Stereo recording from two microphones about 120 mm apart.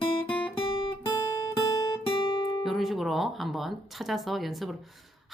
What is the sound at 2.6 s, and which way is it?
Speech, centre (ahead or behind).